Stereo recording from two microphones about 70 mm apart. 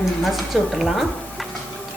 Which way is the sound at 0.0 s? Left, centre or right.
Centre.